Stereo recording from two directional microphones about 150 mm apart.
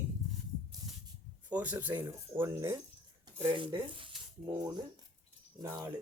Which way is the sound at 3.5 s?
35° right (ahead or behind).